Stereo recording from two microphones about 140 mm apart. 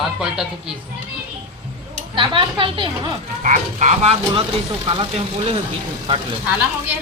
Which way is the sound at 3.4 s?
60° right (ahead or behind).